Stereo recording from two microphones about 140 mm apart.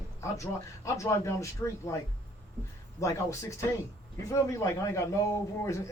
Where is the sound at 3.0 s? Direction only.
20° left (ahead or behind).